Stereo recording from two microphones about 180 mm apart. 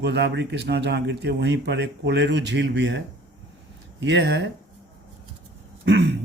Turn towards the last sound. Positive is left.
turn(degrees=-70)  # may be behind; listen again after turning